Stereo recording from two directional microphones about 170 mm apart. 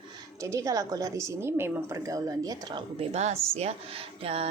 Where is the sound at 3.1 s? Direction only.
40° right (ahead or behind).